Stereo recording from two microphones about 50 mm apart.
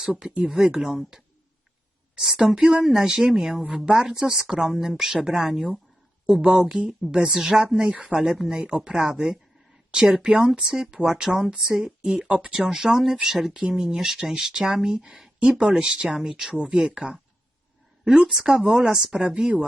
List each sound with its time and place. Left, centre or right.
0.1 s speech: centre
6.2 s a woman's voice: centre
19.1 s speech: right